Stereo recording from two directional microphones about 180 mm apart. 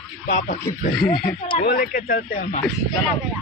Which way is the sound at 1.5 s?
50° left (ahead or behind).